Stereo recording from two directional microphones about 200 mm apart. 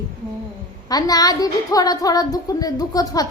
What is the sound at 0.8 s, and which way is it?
A woman's voice, 20° left (ahead or behind).